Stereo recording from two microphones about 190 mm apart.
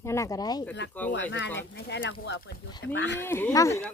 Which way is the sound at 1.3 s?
75° left (ahead or behind).